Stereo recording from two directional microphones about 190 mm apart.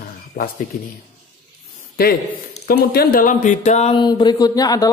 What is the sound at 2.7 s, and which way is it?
Speech, 50° left (ahead or behind).